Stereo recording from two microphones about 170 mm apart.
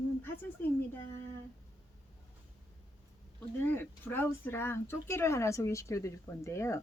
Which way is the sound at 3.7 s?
10° left (ahead or behind).